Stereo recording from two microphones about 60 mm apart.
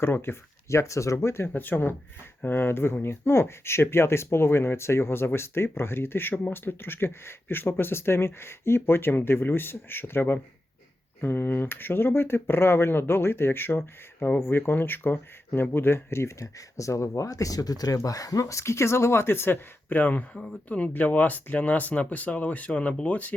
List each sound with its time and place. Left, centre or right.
0.0 s speech: left
16.6 s speech: left
20.3 s speech: centre
20.7 s speech: left